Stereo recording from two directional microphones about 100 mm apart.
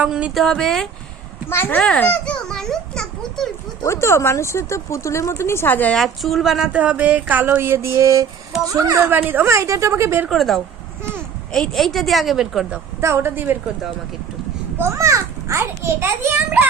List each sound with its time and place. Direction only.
0.0 s speech: 10° right (ahead or behind)
0.3 s a woman's voice: 5° left (ahead or behind)
1.5 s speech: 20° left (ahead or behind)
1.8 s a child's voice: 10° left (ahead or behind)
3.8 s speech: 25° left (ahead or behind)
6.0 s a woman's voice: centre (ahead or behind)
6.7 s a child's voice: 15° right (ahead or behind); by 9.0 s 35° right (ahead or behind)
9.0 s a child's voice: 20° right (ahead or behind)
10.2 s a woman's voice: centre (ahead or behind)
13.0 s a child's voice: 25° right (ahead or behind)
14.8 s a child's voice: 30° right (ahead or behind)